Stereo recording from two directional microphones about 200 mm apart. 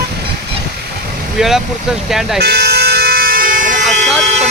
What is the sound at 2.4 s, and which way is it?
Vehicle, 55° right (ahead or behind).